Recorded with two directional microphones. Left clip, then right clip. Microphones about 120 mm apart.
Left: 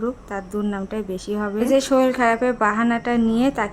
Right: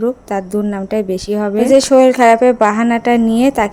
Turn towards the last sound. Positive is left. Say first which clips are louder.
# right 7 dB
turn(degrees=-35)  # may be behind; listen again after turning